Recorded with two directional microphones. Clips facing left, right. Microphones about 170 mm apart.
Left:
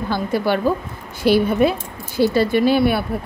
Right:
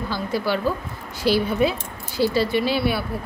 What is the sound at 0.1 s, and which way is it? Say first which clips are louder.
A woman's voice: left 5 dB; 55° left (ahead or behind).